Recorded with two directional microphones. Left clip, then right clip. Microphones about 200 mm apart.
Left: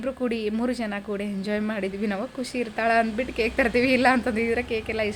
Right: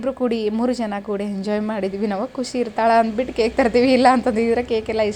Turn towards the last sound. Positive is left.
turn(degrees=-10)  # may be behind; listen again after turning